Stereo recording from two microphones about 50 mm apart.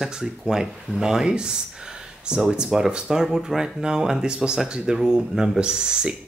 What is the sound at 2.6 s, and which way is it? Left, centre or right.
Speech, centre.